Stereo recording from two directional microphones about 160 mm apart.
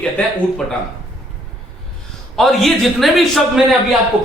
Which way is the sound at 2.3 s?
Centre (ahead or behind).